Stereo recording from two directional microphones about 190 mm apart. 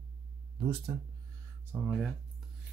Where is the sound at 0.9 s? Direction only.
25° right (ahead or behind).